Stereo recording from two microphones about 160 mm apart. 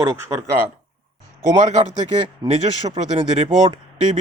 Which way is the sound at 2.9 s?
35° right (ahead or behind).